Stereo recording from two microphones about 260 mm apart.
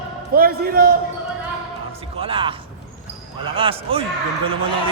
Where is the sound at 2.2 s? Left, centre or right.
Centre.